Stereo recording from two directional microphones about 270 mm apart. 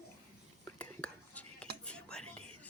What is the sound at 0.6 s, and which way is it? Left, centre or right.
Whispering, centre.